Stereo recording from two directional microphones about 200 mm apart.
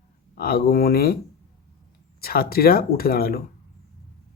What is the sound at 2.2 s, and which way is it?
Speech, 50° left (ahead or behind).